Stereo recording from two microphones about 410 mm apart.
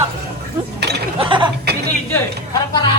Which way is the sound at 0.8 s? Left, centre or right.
Right.